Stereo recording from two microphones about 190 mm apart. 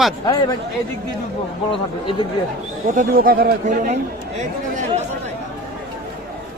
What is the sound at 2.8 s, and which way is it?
Speech, 45° right (ahead or behind).